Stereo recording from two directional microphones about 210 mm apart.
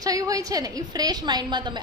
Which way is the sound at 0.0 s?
15° right (ahead or behind).